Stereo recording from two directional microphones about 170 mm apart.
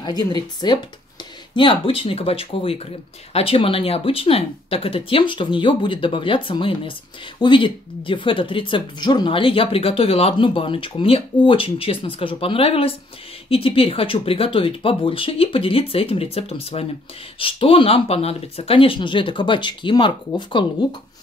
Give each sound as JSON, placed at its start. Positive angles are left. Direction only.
{"t": 0.0, "sound": "speech", "side_deg": 25}